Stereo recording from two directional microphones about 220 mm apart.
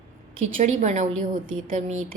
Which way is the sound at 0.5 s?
35° right (ahead or behind).